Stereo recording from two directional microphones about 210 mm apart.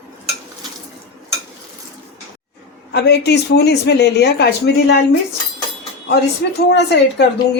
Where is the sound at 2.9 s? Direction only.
55° left (ahead or behind).